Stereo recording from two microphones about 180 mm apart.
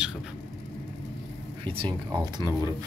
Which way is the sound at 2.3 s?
20° right (ahead or behind).